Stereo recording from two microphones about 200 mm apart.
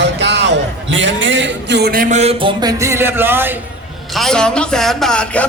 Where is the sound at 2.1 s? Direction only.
30° right (ahead or behind).